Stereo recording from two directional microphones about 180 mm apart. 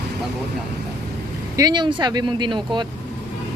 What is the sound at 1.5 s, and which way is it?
Speech, 25° right (ahead or behind).